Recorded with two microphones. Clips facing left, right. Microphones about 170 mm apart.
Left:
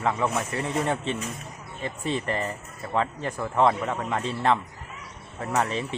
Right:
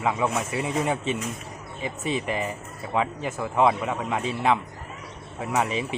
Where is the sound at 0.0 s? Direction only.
10° right (ahead or behind).